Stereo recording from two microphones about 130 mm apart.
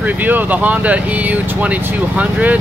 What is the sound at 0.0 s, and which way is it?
Speech, 15° right (ahead or behind).